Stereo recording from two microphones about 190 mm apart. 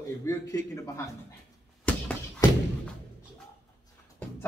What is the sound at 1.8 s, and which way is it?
Slam, 10° left (ahead or behind).